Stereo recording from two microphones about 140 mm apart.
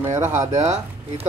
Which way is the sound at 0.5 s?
55° right (ahead or behind).